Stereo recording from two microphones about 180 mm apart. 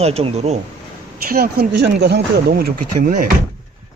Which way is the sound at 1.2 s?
55° right (ahead or behind).